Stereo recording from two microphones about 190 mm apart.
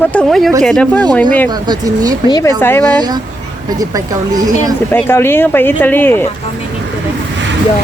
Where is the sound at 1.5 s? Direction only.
20° right (ahead or behind).